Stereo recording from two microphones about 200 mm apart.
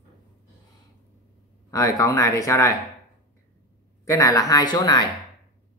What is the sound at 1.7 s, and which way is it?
Speech, 15° left (ahead or behind).